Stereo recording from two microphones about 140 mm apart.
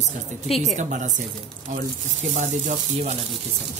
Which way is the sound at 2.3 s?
55° right (ahead or behind).